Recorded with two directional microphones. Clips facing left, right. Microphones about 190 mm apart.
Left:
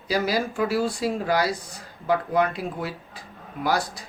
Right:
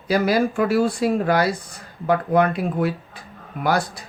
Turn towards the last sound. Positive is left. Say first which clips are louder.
# right 3 dB
turn(degrees=-55)  # may be behind; listen again after turning